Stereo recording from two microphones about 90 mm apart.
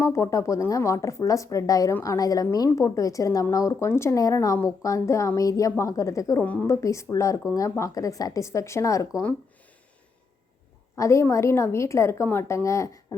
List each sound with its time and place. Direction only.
0.0 s a woman's voice: 35° left (ahead or behind)
6.4 s a woman's voice: 15° left (ahead or behind)
6.7 s speech: 35° left (ahead or behind)
10.9 s speech: 35° left (ahead or behind)